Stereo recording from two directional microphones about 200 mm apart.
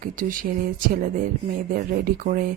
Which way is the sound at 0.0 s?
45° right (ahead or behind).